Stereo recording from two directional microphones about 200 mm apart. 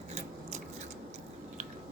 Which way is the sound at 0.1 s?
35° right (ahead or behind).